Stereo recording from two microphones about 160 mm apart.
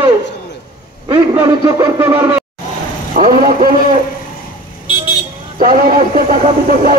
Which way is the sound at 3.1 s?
55° right (ahead or behind).